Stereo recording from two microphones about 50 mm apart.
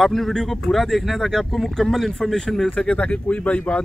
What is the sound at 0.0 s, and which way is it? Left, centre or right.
Speech, centre.